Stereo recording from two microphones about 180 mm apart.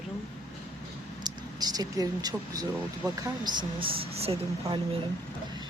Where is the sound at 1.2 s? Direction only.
20° right (ahead or behind).